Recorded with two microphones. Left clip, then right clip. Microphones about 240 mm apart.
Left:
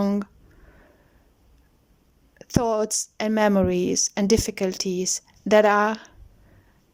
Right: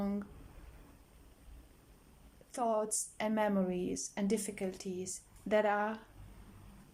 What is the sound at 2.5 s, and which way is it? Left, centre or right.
Speech, left.